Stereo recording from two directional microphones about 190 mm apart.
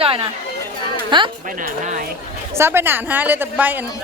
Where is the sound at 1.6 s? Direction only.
45° right (ahead or behind).